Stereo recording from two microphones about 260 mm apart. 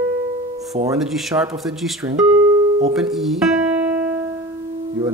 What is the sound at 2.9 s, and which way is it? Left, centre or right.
Guitar, centre.